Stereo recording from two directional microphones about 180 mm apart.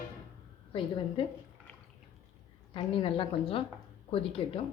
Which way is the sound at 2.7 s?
30° left (ahead or behind).